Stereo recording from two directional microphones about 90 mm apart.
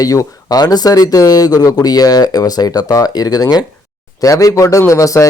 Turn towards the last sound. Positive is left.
turn(degrees=40)  # may be behind; listen again after turning